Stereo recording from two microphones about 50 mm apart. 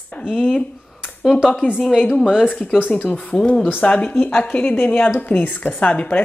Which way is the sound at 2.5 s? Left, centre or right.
Left.